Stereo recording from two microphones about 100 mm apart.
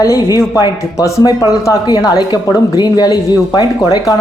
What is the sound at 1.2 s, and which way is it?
Speech, 40° left (ahead or behind).